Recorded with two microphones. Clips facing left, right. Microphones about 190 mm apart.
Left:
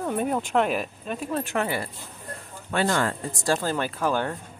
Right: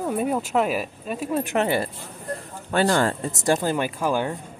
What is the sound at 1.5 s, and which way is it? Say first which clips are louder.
Speech: right 5 dB; 25° right (ahead or behind).